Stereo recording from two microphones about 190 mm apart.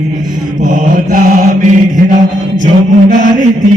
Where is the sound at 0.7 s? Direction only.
45° right (ahead or behind).